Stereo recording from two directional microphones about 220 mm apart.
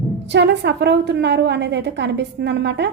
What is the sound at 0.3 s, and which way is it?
Speech, 50° right (ahead or behind).